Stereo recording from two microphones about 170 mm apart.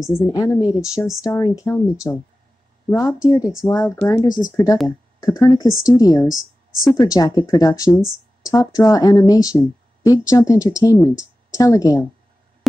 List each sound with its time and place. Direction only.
0.2 s speech: 20° left (ahead or behind)
0.7 s speech: 5° right (ahead or behind)
1.2 s speech: 20° left (ahead or behind)
6.2 s speech: 5° right (ahead or behind)
6.8 s speech: 20° left (ahead or behind)